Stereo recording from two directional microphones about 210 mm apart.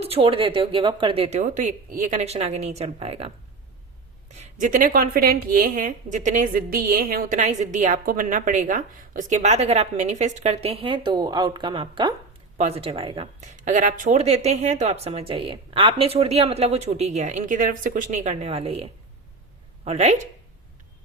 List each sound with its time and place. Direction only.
0.0 s a woman's voice: 25° right (ahead or behind)